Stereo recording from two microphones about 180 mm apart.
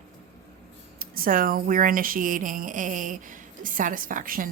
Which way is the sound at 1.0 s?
55° right (ahead or behind).